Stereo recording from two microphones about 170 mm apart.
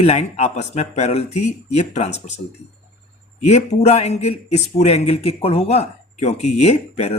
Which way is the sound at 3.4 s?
40° left (ahead or behind).